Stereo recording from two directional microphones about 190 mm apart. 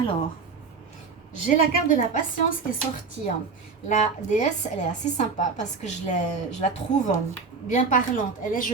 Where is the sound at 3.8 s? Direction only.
40° left (ahead or behind).